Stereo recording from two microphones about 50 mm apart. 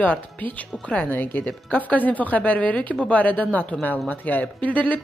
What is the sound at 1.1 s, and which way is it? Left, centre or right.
A woman's voice, left.